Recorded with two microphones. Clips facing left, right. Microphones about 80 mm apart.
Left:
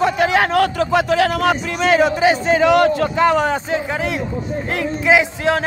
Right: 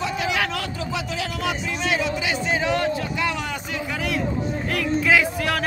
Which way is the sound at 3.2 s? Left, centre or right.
Left.